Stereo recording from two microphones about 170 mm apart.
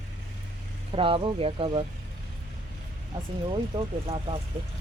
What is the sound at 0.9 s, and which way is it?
Speech, 30° right (ahead or behind).